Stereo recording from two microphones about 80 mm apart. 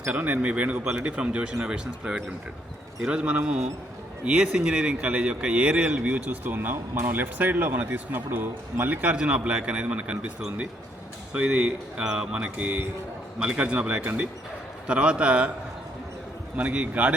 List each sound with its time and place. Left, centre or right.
0.1 s speech: centre
11.3 s speech: centre
16.6 s speech: centre